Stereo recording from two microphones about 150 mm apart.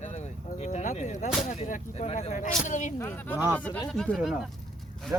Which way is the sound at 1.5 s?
60° left (ahead or behind).